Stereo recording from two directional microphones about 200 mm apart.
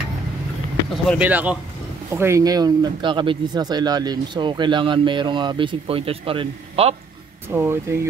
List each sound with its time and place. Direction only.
1.2 s speech: 10° right (ahead or behind); by 7.0 s 30° right (ahead or behind)
7.4 s speech: 10° right (ahead or behind)